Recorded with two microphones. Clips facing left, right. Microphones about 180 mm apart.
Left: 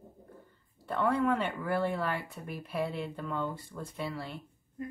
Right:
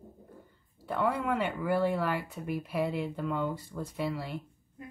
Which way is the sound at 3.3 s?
15° right (ahead or behind).